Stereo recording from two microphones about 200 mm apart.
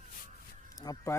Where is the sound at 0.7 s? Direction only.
20° left (ahead or behind).